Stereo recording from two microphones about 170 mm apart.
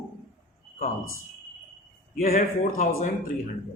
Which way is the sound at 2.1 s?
50° left (ahead or behind).